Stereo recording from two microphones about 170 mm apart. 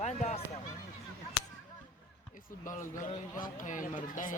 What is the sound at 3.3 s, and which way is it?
Speech, 50° left (ahead or behind).